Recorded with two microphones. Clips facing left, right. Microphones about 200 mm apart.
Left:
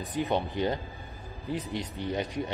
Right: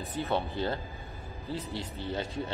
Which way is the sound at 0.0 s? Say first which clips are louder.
Left 2 dB; 15° left (ahead or behind).